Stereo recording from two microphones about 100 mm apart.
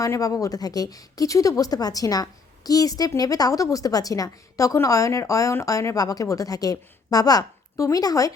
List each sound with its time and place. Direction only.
0.0 s a woman's voice: 35° left (ahead or behind)